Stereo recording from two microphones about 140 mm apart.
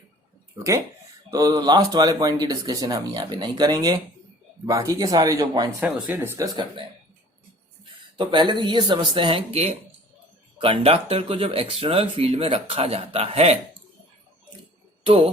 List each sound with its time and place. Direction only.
1.3 s speech: 25° right (ahead or behind)
5.8 s speech: 15° right (ahead or behind)
8.1 s speech: 35° right (ahead or behind)
15.0 s speech: 45° right (ahead or behind)